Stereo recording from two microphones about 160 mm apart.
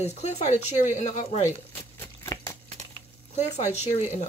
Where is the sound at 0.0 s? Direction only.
45° left (ahead or behind).